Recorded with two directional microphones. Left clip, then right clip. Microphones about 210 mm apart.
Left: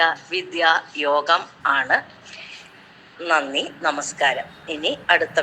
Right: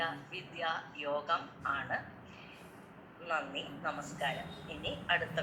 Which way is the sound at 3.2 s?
45° left (ahead or behind).